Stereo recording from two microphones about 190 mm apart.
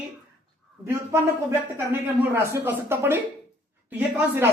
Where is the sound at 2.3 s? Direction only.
15° right (ahead or behind).